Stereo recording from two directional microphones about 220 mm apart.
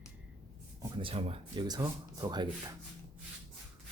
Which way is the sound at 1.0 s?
25° right (ahead or behind).